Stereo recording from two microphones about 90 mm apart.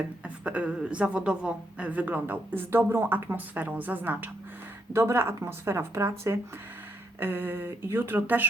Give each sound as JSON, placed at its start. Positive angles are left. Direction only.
{"t": 0.4, "sound": "a woman's voice", "side_deg": -15}